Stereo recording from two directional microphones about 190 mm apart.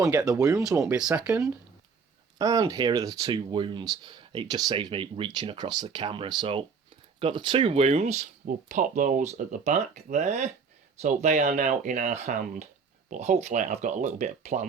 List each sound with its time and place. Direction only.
0.0 s speech: 15° right (ahead or behind)
1.3 s speech: 15° right (ahead or behind); by 14.6 s 40° right (ahead or behind)